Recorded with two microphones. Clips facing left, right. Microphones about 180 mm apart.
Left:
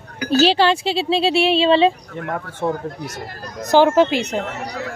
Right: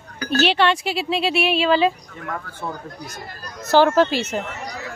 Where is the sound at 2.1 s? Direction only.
60° left (ahead or behind).